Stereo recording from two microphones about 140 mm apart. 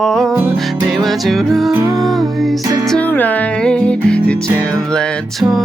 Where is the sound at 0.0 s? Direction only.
5° left (ahead or behind).